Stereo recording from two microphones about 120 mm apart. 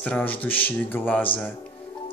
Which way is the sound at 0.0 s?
15° left (ahead or behind).